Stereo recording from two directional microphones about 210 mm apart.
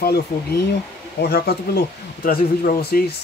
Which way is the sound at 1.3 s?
50° left (ahead or behind).